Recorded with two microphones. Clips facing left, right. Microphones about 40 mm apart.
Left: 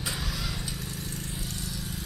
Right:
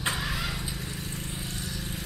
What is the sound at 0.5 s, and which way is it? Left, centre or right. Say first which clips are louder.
Vehicle: right 1 dB; centre.